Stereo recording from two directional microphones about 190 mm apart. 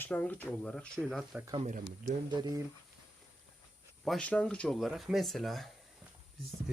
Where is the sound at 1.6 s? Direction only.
40° right (ahead or behind).